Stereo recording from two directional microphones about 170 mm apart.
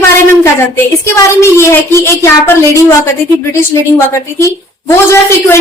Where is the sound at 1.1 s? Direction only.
15° left (ahead or behind).